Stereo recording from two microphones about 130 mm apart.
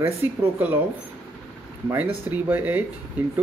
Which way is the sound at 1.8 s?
15° right (ahead or behind).